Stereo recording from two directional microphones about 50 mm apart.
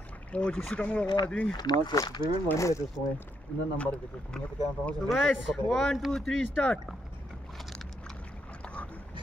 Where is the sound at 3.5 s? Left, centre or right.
Centre.